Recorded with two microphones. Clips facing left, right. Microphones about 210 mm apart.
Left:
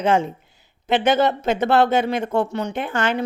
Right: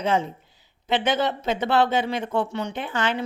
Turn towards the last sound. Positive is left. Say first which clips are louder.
# left 4 dB
turn(degrees=45)  # may be behind; listen again after turning